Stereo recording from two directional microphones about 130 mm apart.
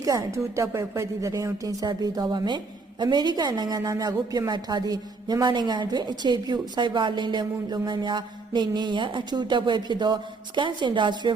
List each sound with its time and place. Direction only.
0.0 s a woman's voice: 25° right (ahead or behind)